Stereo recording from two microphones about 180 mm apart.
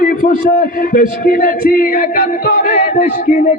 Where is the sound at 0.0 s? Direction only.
50° left (ahead or behind).